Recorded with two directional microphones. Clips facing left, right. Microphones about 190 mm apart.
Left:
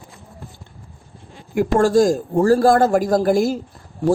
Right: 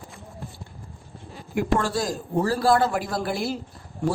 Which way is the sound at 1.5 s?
45° left (ahead or behind).